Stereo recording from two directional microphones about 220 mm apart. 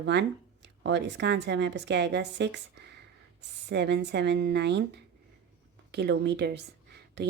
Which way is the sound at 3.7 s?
50° right (ahead or behind).